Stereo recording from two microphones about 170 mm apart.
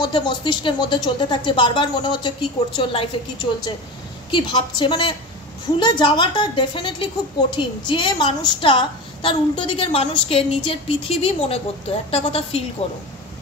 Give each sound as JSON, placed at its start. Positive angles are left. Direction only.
{"t": 0.0, "sound": "a woman's voice", "side_deg": 25}